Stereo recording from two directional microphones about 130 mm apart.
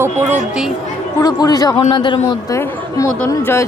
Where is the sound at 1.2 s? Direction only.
30° left (ahead or behind).